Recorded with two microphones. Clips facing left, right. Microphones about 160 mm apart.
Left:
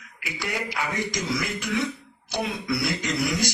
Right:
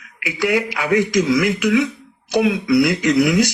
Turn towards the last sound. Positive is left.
turn(degrees=-75)  # may be behind; listen again after turning